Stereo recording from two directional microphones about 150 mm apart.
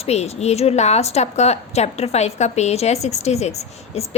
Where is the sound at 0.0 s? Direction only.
45° left (ahead or behind).